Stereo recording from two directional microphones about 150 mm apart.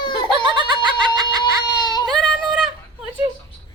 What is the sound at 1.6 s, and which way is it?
Baby cry, 25° left (ahead or behind).